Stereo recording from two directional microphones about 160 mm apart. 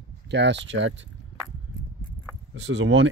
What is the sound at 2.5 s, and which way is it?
Speech, 90° right.